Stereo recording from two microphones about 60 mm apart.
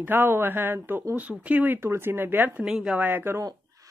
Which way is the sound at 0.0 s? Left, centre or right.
Right.